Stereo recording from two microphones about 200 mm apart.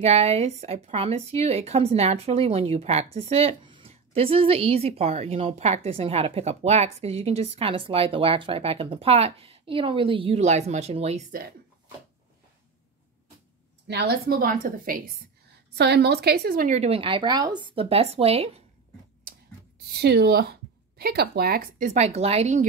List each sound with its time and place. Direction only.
0.0 s a woman's voice: 30° right (ahead or behind)
13.8 s a woman's voice: 55° right (ahead or behind)
15.5 s a woman's voice: 55° right (ahead or behind); by 18.6 s 30° right (ahead or behind)
19.9 s a woman's voice: 55° right (ahead or behind); by 22.7 s 35° right (ahead or behind)